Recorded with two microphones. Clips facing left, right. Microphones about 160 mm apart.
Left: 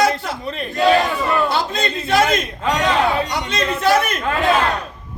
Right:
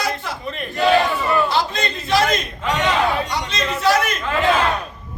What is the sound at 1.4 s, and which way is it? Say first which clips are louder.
Speech: left 1 dB; 55° left (ahead or behind).